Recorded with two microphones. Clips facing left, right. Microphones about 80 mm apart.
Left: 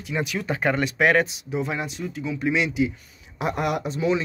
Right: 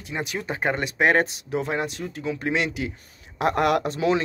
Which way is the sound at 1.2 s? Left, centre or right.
Right.